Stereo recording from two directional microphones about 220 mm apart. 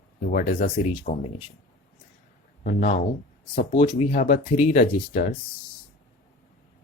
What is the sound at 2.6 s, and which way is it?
Speech, 35° left (ahead or behind).